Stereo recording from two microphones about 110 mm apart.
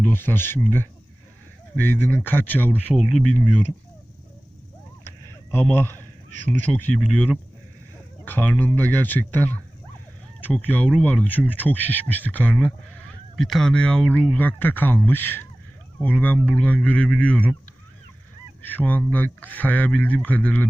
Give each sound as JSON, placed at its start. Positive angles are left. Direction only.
{"t": 0.0, "sound": "speech", "side_deg": 20}
{"t": 2.9, "sound": "speech", "side_deg": 0}
{"t": 5.5, "sound": "a man's voice", "side_deg": 15}
{"t": 8.2, "sound": "speech", "side_deg": 15}
{"t": 13.3, "sound": "speech", "side_deg": 5}
{"t": 18.6, "sound": "speech", "side_deg": 15}